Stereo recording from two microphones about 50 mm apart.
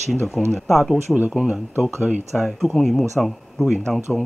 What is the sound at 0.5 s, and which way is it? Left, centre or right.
Speech, centre.